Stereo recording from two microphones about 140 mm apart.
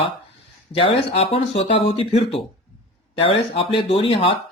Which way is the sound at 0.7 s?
40° left (ahead or behind).